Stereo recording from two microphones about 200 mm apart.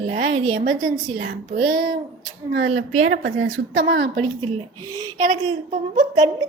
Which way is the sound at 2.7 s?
90° right.